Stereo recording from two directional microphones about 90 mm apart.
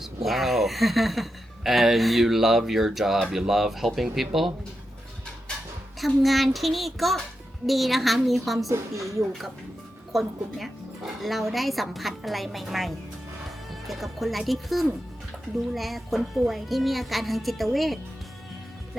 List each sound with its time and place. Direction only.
0.0 s speech: centre (ahead or behind)
6.0 s speech: centre (ahead or behind)
8.7 s a woman's voice: 35° right (ahead or behind)
10.1 s speech: centre (ahead or behind)